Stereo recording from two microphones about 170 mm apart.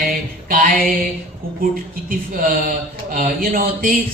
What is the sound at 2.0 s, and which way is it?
Speech, 55° right (ahead or behind).